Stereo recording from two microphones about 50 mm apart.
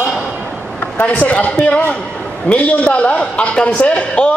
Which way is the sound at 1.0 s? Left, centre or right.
Left.